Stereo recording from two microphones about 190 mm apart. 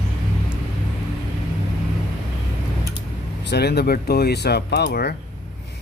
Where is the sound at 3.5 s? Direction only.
60° left (ahead or behind).